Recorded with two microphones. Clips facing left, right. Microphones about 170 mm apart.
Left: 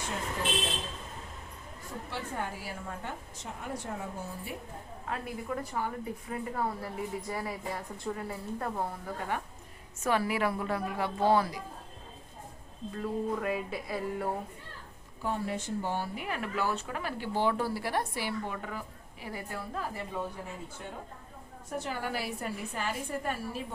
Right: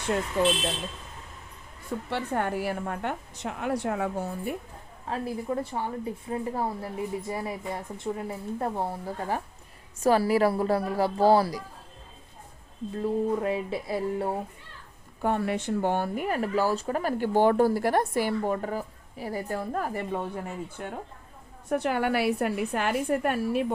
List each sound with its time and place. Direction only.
2.0 s a woman's voice: 65° right (ahead or behind)
5.0 s a woman's voice: 30° right (ahead or behind)
13.0 s a woman's voice: 25° right (ahead or behind)
15.2 s a woman's voice: 65° right (ahead or behind)